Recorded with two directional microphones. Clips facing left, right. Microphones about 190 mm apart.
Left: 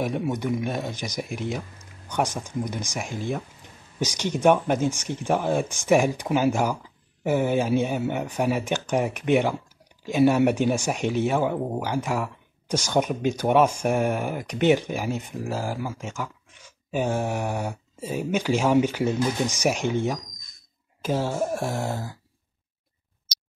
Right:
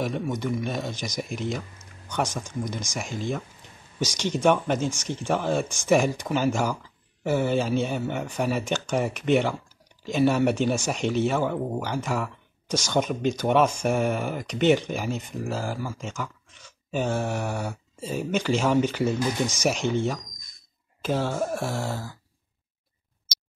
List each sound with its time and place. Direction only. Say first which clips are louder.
0.3 s speech: left 2 dB; 10° left (ahead or behind)
21.0 s speech: left 1 dB; 10° left (ahead or behind)